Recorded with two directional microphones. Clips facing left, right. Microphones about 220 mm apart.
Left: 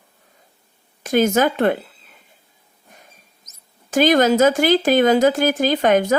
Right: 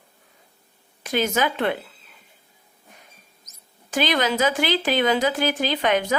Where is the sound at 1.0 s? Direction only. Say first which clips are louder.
Left 6 dB; 45° left (ahead or behind).